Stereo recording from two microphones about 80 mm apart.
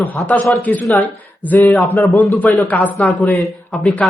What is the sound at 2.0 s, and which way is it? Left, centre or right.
Speech, centre.